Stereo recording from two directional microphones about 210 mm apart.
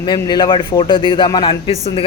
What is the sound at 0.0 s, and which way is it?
Speech, 20° left (ahead or behind).